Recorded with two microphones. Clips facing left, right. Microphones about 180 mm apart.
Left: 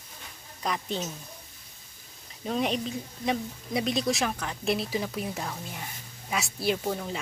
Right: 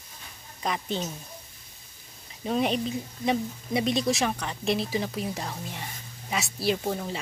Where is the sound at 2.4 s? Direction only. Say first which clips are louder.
Right 2 dB; centre (ahead or behind).